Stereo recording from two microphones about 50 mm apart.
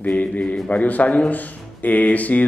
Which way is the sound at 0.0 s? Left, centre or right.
Left.